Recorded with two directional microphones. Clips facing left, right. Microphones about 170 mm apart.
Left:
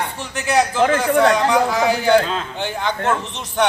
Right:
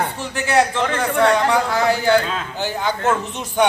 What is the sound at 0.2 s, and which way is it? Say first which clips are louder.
A man's voice: even; centre (ahead or behind).